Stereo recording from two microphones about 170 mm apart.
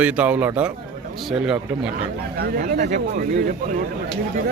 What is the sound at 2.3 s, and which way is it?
Speech, 55° right (ahead or behind).